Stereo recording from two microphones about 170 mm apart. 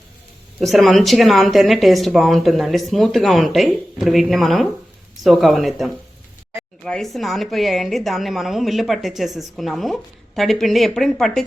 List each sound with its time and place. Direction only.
0.6 s a woman's voice: centre (ahead or behind)